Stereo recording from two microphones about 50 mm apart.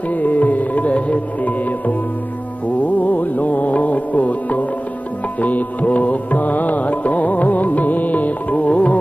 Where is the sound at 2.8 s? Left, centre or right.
Left.